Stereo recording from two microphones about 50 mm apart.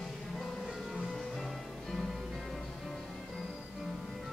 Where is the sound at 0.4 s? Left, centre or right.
Centre.